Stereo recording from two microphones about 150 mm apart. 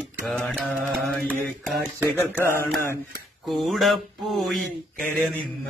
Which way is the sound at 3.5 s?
Centre (ahead or behind).